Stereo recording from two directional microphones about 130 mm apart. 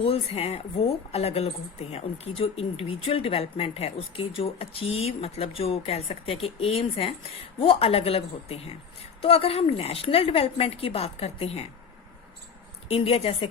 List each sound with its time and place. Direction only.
0.0 s speech: 50° left (ahead or behind)
12.9 s speech: 50° left (ahead or behind)